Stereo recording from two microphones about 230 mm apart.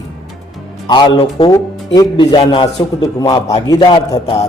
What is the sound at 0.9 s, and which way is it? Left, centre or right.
A man's voice, centre.